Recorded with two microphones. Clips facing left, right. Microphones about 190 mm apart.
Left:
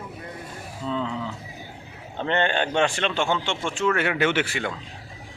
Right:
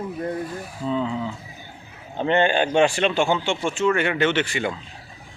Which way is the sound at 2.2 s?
10° right (ahead or behind).